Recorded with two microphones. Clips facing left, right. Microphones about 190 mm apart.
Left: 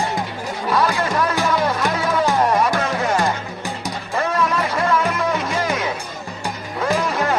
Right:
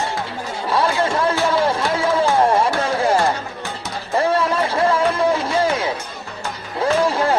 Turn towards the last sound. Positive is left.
turn(degrees=-30)  # may be behind; listen again after turning